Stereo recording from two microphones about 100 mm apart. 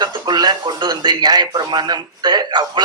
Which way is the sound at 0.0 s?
45° right (ahead or behind).